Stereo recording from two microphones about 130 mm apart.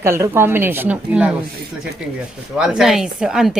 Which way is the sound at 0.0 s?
20° right (ahead or behind).